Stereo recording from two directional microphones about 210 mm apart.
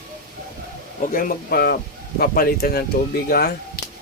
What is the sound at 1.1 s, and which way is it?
Speech, 45° left (ahead or behind).